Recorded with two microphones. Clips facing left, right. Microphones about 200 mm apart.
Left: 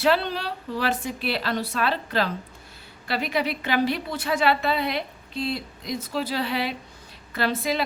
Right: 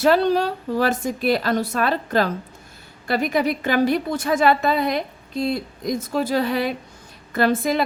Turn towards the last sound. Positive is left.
turn(degrees=-50)  # may be behind; listen again after turning